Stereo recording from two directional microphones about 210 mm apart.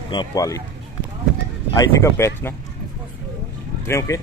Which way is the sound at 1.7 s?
15° left (ahead or behind).